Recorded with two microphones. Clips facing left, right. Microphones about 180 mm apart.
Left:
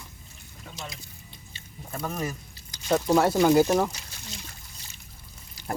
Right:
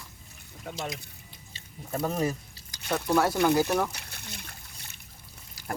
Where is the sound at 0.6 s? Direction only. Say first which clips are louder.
Right 5 dB; 55° right (ahead or behind).